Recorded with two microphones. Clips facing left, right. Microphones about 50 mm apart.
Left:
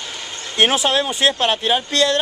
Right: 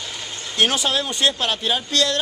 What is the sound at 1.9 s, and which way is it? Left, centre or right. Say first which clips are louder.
Speech: left 3 dB; centre.